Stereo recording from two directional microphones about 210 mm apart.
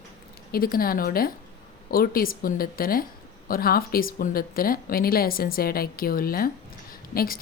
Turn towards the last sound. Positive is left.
turn(degrees=45)  # may be behind; listen again after turning